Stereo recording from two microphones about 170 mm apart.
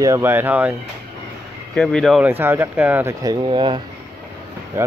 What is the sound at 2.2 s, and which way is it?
Speech, 10° right (ahead or behind).